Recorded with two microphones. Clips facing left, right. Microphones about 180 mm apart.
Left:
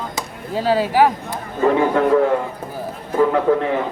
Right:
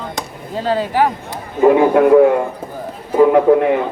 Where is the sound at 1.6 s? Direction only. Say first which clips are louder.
Right 6 dB; 10° right (ahead or behind).